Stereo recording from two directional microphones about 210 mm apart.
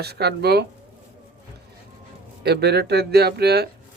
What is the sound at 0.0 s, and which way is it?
Speech, 50° right (ahead or behind).